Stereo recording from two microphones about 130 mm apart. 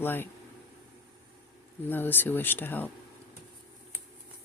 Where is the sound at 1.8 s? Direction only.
15° left (ahead or behind).